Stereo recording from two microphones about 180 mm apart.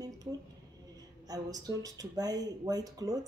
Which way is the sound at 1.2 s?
20° right (ahead or behind).